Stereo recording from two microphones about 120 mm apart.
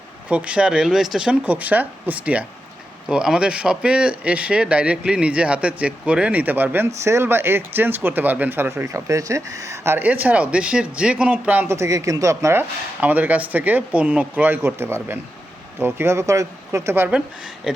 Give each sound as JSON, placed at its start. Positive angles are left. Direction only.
{"t": 0.3, "sound": "speech", "side_deg": -10}
{"t": 13.0, "sound": "speech", "side_deg": -15}
{"t": 17.1, "sound": "a woman's voice", "side_deg": -5}